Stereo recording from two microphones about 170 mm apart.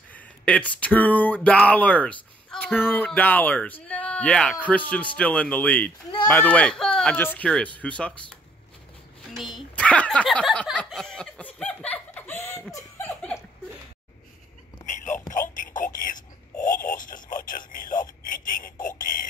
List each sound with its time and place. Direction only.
0.1 s speech: 10° left (ahead or behind)
9.3 s speech: centre (ahead or behind)
12.7 s laughter: 15° left (ahead or behind)
15.5 s a sound: 50° left (ahead or behind)
16.8 s radio: 50° left (ahead or behind)